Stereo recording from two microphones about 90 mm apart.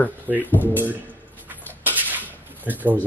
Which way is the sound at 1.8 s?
20° right (ahead or behind).